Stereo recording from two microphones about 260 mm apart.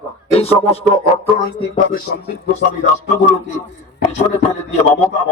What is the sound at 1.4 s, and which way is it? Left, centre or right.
Music, left.